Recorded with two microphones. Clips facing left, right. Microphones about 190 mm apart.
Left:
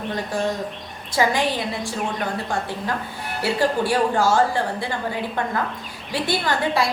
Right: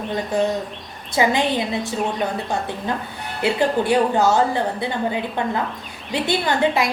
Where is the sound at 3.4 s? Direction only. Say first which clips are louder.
Right 2 dB; 20° right (ahead or behind).